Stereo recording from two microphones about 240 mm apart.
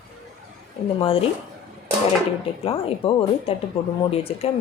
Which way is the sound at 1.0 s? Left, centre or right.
Left.